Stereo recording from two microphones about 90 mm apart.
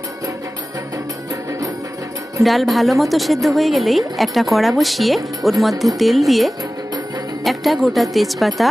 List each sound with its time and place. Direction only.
1.3 s music: 40° right (ahead or behind)
2.4 s a woman's voice: centre (ahead or behind)